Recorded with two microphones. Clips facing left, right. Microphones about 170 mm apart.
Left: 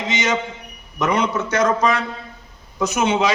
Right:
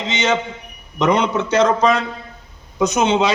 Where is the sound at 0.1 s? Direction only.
25° right (ahead or behind).